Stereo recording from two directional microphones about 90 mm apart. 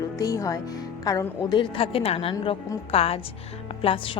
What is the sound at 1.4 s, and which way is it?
Speech, 50° left (ahead or behind).